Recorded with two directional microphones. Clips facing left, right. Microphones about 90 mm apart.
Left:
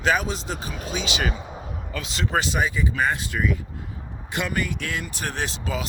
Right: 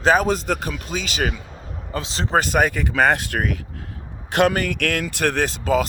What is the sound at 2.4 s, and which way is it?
Speech, 55° right (ahead or behind).